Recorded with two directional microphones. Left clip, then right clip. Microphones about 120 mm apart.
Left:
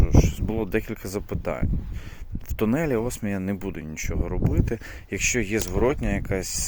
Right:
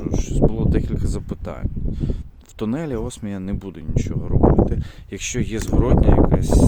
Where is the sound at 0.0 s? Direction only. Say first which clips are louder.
Right 4 dB; 25° right (ahead or behind).